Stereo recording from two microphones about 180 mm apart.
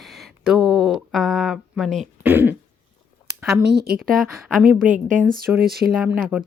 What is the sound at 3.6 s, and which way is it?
Speech, 60° right (ahead or behind).